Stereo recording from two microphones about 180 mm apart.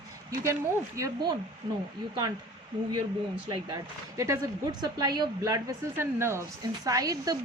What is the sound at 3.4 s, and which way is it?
A woman's voice, 25° right (ahead or behind).